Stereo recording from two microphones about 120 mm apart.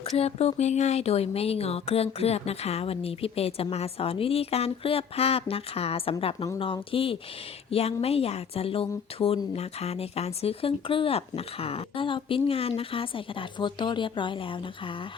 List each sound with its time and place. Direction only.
0.0 s a woman's voice: 60° left (ahead or behind)